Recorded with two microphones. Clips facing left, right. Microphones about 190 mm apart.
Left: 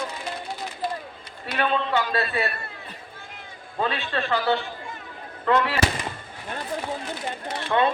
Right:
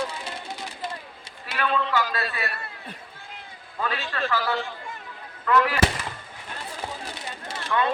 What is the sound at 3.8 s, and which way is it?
Speech, 30° left (ahead or behind).